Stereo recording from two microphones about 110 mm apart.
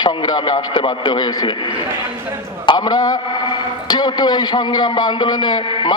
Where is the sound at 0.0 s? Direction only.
45° left (ahead or behind).